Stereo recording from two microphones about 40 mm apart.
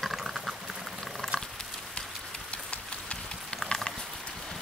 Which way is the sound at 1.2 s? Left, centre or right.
Centre.